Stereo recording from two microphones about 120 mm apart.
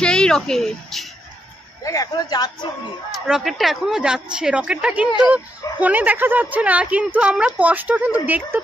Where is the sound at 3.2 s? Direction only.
5° right (ahead or behind).